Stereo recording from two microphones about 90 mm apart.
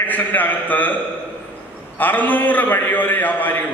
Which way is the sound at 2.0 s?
20° left (ahead or behind).